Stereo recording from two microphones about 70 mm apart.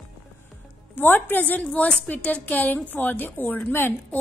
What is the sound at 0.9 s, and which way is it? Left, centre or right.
A woman's voice, left.